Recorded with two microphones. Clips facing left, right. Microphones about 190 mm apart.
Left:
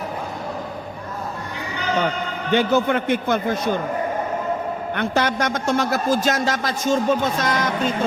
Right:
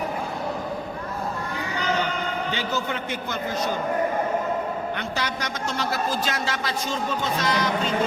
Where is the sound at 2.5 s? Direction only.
55° left (ahead or behind).